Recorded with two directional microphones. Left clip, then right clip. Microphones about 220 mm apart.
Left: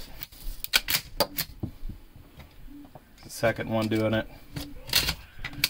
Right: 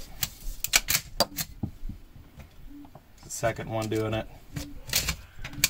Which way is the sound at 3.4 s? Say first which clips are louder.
Left 3 dB; 30° left (ahead or behind).